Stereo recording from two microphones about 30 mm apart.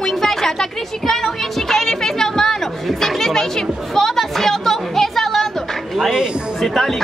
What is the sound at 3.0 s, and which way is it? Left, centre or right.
Chatter, centre.